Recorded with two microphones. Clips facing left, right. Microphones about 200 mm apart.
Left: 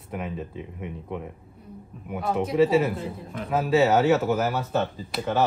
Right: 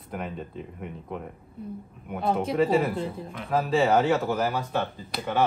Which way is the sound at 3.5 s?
5° left (ahead or behind).